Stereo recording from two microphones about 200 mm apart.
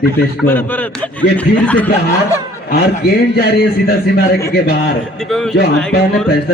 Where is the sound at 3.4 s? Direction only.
50° left (ahead or behind).